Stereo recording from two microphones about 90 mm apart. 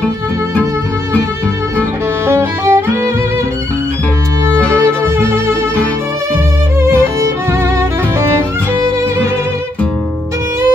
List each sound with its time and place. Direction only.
2.2 s music: 30° right (ahead or behind)
5.0 s music: 30° right (ahead or behind)